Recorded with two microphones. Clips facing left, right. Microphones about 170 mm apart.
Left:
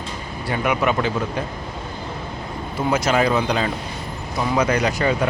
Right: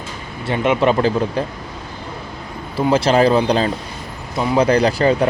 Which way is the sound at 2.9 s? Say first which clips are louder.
Right 5 dB; 30° right (ahead or behind).